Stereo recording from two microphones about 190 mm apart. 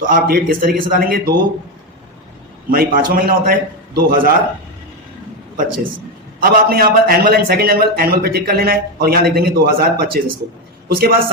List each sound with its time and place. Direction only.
0.0 s a man's voice: 45° right (ahead or behind)
2.6 s a man's voice: 50° right (ahead or behind)
6.4 s a man's voice: 50° right (ahead or behind)